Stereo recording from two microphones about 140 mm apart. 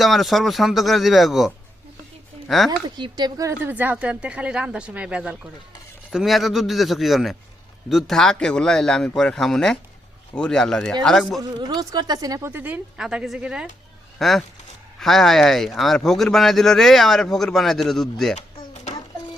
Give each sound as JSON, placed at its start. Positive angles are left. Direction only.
{"t": 0.0, "sound": "a man's voice", "side_deg": 0}
{"t": 2.6, "sound": "speech", "side_deg": -30}
{"t": 3.6, "sound": "a man's voice", "side_deg": -10}
{"t": 11.3, "sound": "speech", "side_deg": -30}
{"t": 12.5, "sound": "a man's voice", "side_deg": -10}